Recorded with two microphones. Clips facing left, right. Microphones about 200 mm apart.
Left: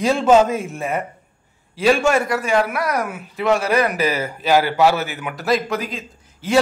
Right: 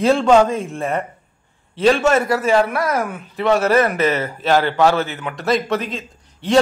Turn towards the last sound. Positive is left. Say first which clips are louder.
# right 2 dB
turn(degrees=0)  # may be behind; listen again after turning